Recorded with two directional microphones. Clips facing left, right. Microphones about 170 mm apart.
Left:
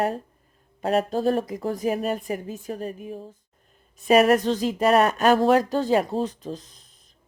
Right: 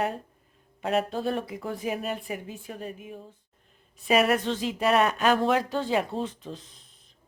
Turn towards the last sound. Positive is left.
turn(degrees=40)  # may be behind; listen again after turning